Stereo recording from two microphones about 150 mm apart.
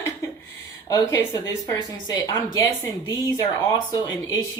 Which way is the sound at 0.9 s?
20° left (ahead or behind).